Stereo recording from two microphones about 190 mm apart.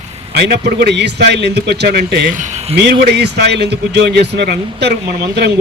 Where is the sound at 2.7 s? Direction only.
60° right (ahead or behind).